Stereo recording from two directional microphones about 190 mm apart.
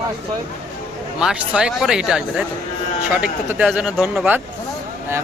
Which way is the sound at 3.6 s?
Centre (ahead or behind).